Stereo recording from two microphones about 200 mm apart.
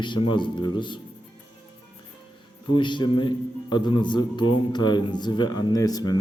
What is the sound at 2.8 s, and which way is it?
A man's voice, 25° left (ahead or behind).